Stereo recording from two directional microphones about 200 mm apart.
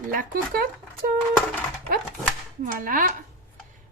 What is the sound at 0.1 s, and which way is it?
A woman's voice, 45° right (ahead or behind).